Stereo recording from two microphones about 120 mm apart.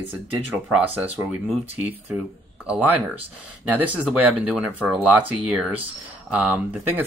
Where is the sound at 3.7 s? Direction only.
15° right (ahead or behind).